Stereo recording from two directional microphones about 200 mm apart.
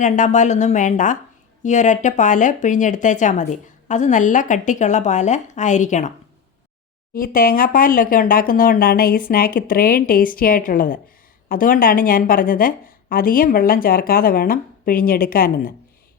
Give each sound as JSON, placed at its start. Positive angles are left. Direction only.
{"t": 0.0, "sound": "speech", "side_deg": 35}
{"t": 7.1, "sound": "a woman's voice", "side_deg": 45}